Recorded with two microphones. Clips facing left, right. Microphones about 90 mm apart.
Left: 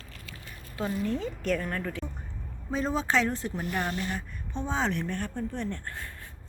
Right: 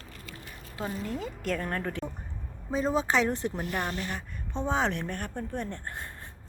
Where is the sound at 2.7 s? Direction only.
10° right (ahead or behind).